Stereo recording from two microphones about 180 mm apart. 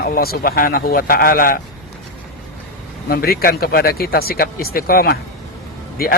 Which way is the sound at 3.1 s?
55° left (ahead or behind).